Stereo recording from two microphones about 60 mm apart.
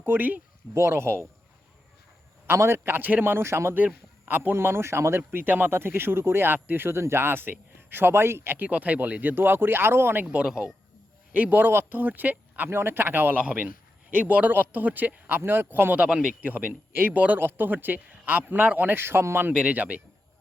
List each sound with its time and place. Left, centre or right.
0.0 s a man's voice: right
0.7 s speech: right
2.5 s speech: right
3.3 s speech: right
4.3 s speech: right
4.5 s speech: right
9.3 s speech: right
10.4 s speech: centre
11.3 s speech: right
12.7 s a man's voice: right
16.4 s a man's voice: right
19.5 s a man's voice: right